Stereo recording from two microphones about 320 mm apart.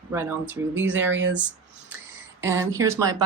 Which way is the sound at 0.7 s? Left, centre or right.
Right.